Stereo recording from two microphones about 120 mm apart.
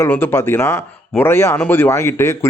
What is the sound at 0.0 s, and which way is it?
Speech, 20° left (ahead or behind).